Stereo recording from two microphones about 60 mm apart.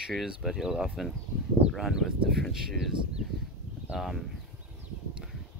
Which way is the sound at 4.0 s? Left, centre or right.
Centre.